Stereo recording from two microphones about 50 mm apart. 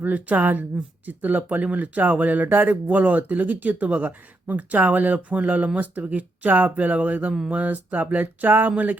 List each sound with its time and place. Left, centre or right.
0.0 s speech: right